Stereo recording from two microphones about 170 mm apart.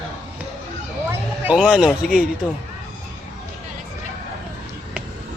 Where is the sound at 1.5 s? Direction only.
5° right (ahead or behind).